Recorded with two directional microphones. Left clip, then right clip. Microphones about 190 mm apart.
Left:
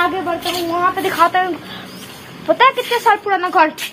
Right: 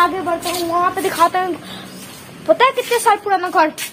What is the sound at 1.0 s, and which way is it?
A woman's voice, 5° right (ahead or behind).